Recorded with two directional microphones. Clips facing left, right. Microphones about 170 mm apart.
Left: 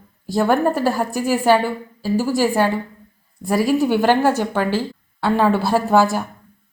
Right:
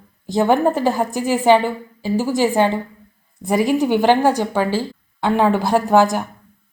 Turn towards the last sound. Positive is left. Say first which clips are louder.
# right 1 dB
turn(degrees=-15)  # may be behind; listen again after turning